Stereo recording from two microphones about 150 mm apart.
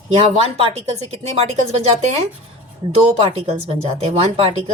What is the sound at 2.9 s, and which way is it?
Speech, 40° right (ahead or behind).